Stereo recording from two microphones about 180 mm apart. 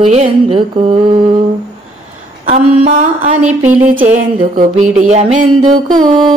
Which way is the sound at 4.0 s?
45° right (ahead or behind).